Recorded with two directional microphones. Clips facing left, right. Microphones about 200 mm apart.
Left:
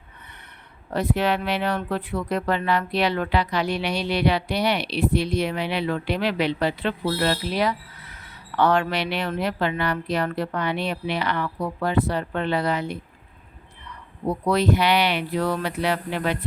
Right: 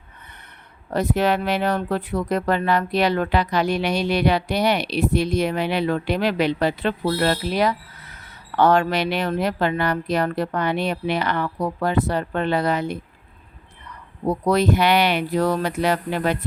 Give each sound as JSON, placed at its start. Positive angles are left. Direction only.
{"t": 0.9, "sound": "speech", "side_deg": -45}
{"t": 14.3, "sound": "speech", "side_deg": -45}